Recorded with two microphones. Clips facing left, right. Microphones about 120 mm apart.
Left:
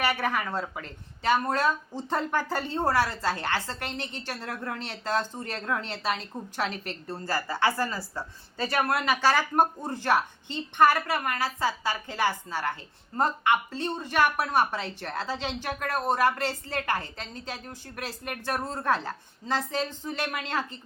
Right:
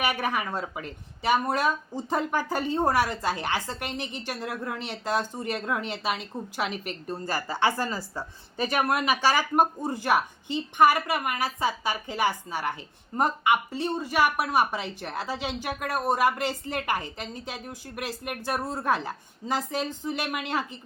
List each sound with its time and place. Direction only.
0.0 s speech: 15° right (ahead or behind)